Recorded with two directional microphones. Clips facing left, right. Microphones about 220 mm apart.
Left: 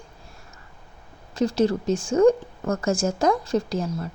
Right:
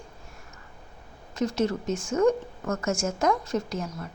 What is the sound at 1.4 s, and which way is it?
A woman's voice, 30° left (ahead or behind).